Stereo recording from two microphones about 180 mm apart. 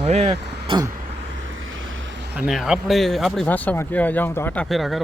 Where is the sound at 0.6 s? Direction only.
25° right (ahead or behind).